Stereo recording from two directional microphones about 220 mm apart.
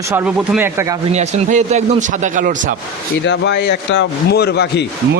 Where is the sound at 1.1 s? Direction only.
35° right (ahead or behind).